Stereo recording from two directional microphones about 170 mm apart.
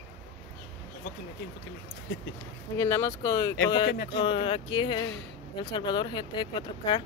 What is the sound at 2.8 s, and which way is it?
Speech, 15° left (ahead or behind).